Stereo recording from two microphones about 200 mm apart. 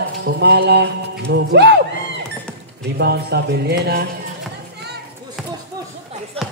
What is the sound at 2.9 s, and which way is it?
Speech, 55° right (ahead or behind).